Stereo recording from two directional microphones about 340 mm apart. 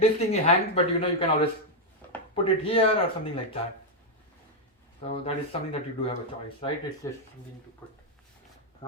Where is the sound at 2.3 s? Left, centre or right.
Centre.